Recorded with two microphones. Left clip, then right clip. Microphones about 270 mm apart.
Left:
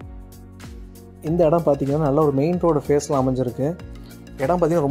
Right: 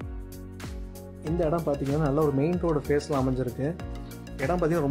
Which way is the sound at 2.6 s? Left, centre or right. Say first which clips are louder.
Left 10 dB; centre.